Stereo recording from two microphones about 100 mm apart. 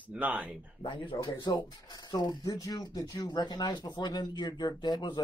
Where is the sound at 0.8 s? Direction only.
55° left (ahead or behind).